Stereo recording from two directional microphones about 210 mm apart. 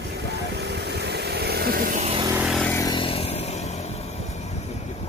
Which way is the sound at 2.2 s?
5° right (ahead or behind).